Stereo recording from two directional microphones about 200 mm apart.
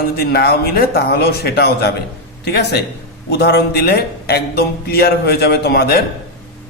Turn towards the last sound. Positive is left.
turn(degrees=50)  # may be behind; listen again after turning